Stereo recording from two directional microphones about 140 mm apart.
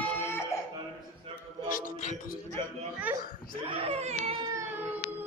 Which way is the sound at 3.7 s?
45° right (ahead or behind).